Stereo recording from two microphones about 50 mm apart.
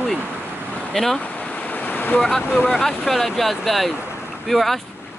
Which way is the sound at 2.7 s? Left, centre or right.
Centre.